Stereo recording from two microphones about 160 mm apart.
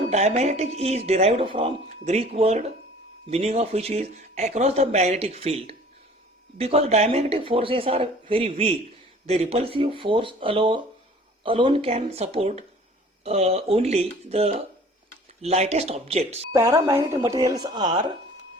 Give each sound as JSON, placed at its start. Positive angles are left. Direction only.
{"t": 0.1, "sound": "speech", "side_deg": -45}
{"t": 16.5, "sound": "speech", "side_deg": -15}